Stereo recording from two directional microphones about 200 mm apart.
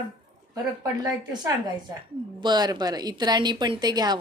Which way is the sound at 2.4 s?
20° right (ahead or behind).